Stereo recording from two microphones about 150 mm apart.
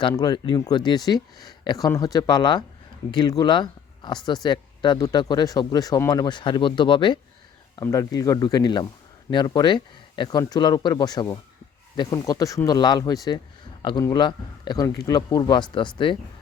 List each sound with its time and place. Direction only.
0.1 s speech: 25° left (ahead or behind)